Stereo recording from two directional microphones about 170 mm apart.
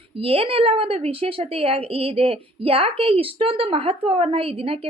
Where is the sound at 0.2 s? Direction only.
35° right (ahead or behind).